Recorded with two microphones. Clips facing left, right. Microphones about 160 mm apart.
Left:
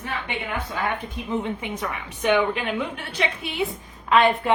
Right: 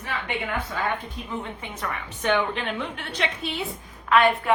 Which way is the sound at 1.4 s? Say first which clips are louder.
Left 5 dB; 15° left (ahead or behind).